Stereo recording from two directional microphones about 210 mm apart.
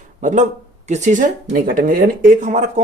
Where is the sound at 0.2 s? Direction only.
35° right (ahead or behind).